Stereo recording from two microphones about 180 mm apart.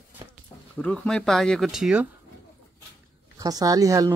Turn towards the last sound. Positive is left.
turn(degrees=-20)  # may be behind; listen again after turning